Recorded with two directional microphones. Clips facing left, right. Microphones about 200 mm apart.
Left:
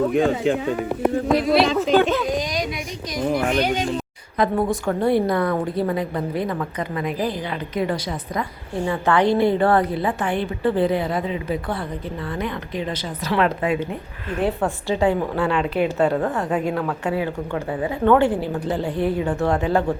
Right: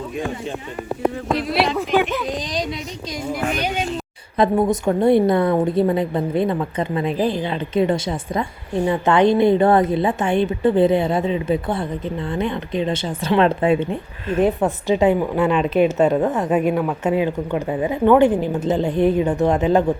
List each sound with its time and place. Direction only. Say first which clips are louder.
0.0 s speech: left 8 dB; 75° left (ahead or behind); by 0.8 s 90° left
1.4 s speech: left 1 dB; 5° right (ahead or behind)
4.4 s a woman's voice: right 3 dB; 25° right (ahead or behind)